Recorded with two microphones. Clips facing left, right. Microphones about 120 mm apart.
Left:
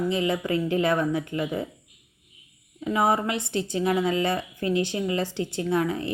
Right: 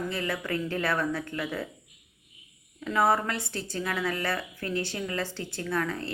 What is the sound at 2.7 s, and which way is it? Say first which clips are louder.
A woman's voice: left 2 dB; 20° left (ahead or behind).